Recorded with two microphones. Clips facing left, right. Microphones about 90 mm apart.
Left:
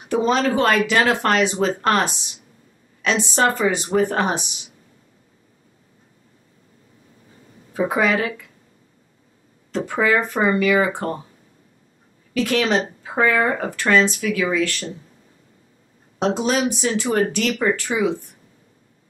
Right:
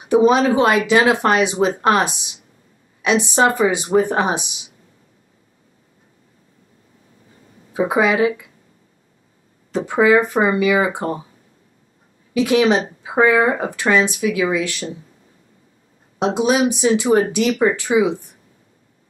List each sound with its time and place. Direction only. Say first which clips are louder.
0.0 s speech: right 5 dB; 15° right (ahead or behind)
7.7 s speech: right 3 dB; 15° right (ahead or behind)
9.7 s speech: right 5 dB; 15° right (ahead or behind)
12.4 s speech: right 4 dB; 15° right (ahead or behind)
16.2 s speech: right 3 dB; 15° right (ahead or behind)